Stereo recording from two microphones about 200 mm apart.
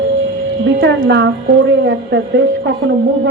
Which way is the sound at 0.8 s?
60° right (ahead or behind).